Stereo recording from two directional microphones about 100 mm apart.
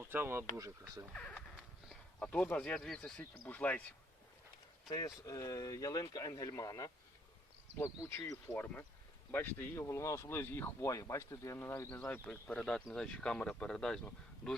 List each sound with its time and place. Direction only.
0.0 s speech: 25° right (ahead or behind)
0.5 s speech: 35° right (ahead or behind)
1.1 s a sound: 10° left (ahead or behind)
2.2 s speech: 15° left (ahead or behind)
4.9 s speech: 35° left (ahead or behind)
7.8 s speech: 25° left (ahead or behind)
8.5 s speech: 15° left (ahead or behind)